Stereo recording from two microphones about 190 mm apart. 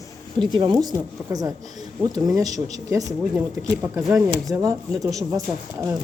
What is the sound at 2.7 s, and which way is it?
Speech, 15° right (ahead or behind).